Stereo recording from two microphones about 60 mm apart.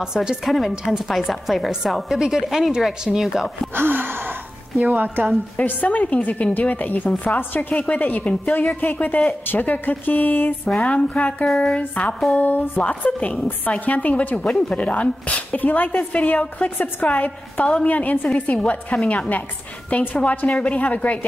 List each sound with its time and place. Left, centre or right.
0.0 s a woman's voice: centre
0.5 s a woman's voice: centre
3.7 s gasp: right
4.8 s a woman's voice: right
5.6 s a woman's voice: left
10.8 s a woman's voice: centre